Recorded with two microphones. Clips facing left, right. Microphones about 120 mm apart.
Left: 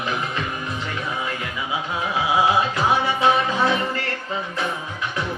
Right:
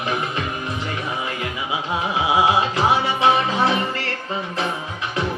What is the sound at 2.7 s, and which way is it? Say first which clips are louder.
Music: right 1 dB; 20° right (ahead or behind).